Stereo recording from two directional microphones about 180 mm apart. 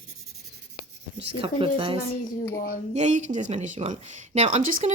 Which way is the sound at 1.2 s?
30° right (ahead or behind).